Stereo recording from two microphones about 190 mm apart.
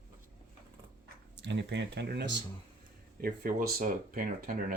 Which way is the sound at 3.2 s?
50° right (ahead or behind).